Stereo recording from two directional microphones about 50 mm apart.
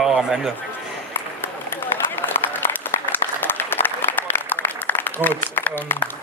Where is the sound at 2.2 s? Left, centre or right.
Left.